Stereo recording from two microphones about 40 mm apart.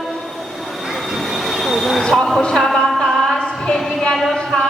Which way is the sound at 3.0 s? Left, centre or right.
Centre.